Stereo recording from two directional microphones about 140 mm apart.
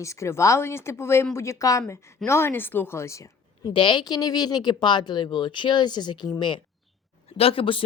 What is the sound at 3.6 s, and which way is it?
Speech, 35° left (ahead or behind).